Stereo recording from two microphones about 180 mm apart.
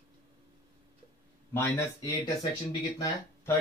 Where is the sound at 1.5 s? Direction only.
15° left (ahead or behind).